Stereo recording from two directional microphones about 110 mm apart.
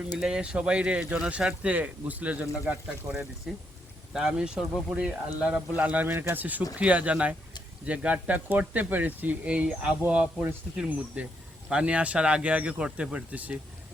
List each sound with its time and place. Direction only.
0.2 s speech: 10° right (ahead or behind)